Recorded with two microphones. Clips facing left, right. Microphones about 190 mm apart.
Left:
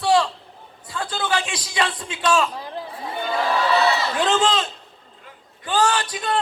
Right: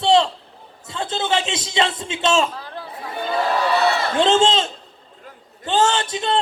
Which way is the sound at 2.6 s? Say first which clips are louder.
Left 2 dB; 15° left (ahead or behind).